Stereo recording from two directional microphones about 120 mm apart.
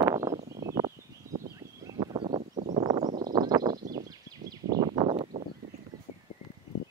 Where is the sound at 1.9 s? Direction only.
45° right (ahead or behind).